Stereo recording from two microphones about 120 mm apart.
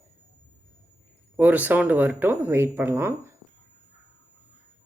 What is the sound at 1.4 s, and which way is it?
Speech, 15° right (ahead or behind).